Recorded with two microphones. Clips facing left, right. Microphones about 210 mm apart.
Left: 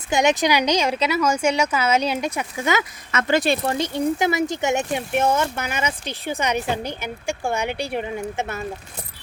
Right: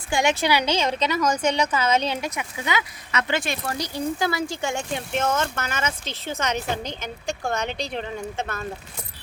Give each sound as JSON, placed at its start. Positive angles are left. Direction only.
{"t": 0.1, "sound": "speech", "side_deg": 20}
{"t": 2.3, "sound": "speech", "side_deg": 45}